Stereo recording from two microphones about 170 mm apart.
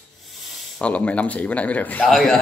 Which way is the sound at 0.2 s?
Centre (ahead or behind).